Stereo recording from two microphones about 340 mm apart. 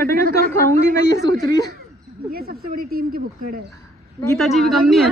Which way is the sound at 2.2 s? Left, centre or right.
Right.